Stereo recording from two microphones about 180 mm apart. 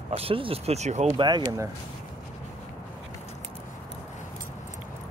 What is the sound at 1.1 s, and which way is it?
Speech, 25° right (ahead or behind).